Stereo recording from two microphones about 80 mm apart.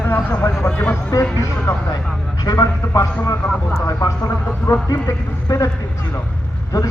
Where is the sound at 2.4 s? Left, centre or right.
Left.